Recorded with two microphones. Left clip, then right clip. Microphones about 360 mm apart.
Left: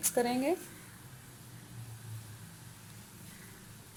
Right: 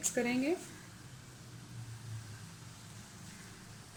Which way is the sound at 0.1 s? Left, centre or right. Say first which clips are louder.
Left 4 dB; left.